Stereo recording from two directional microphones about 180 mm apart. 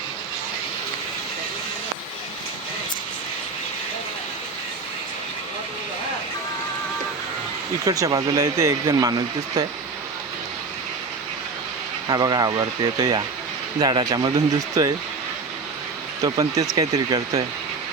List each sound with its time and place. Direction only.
7.9 s speech: 20° right (ahead or behind)
12.0 s speech: 20° right (ahead or behind)
16.2 s speech: 20° right (ahead or behind)